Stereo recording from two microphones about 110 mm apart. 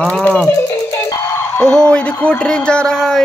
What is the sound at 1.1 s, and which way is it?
Music, 30° left (ahead or behind).